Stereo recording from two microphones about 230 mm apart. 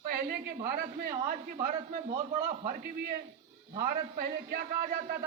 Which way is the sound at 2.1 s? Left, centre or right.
Right.